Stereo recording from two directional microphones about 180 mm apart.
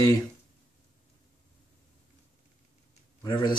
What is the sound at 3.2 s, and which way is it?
Speech, 25° left (ahead or behind).